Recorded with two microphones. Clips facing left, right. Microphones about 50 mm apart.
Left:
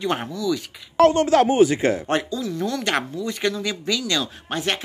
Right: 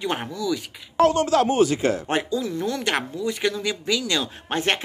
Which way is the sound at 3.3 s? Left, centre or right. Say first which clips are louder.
Left 1 dB; centre.